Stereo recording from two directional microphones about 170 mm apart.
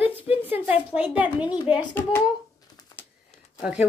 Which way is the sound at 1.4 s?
25° left (ahead or behind).